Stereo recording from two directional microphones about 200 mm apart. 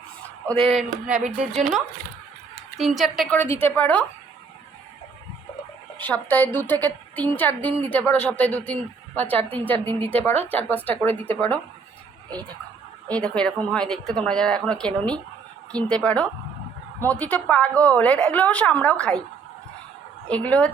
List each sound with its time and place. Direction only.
0.6 s a woman's voice: centre (ahead or behind)
6.0 s a woman's voice: 10° left (ahead or behind)
13.1 s a woman's voice: 5° left (ahead or behind)
20.2 s speech: 5° left (ahead or behind)